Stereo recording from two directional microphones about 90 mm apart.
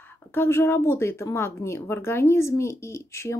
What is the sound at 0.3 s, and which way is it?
Speech, 25° left (ahead or behind).